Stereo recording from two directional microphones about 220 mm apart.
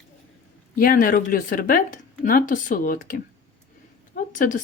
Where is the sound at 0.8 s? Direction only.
40° left (ahead or behind).